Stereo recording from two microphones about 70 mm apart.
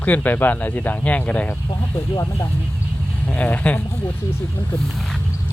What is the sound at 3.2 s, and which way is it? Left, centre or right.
Speech, left.